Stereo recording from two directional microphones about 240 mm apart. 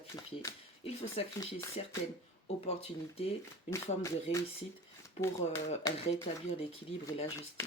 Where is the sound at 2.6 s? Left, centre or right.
Left.